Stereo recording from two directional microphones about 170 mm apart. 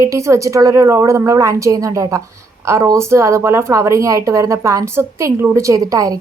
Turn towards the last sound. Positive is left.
turn(degrees=-20)  # may be behind; listen again after turning